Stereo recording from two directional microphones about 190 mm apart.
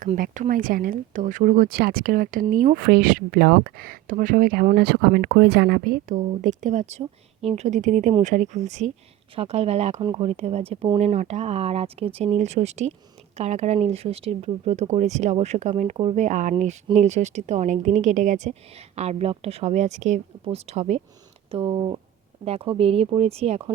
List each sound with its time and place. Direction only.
0.0 s speech: 40° right (ahead or behind)